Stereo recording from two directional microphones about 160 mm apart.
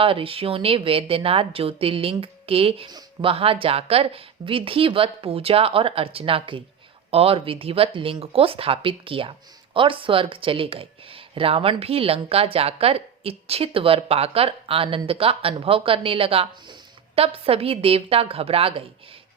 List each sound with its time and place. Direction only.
0.0 s speech: 35° right (ahead or behind)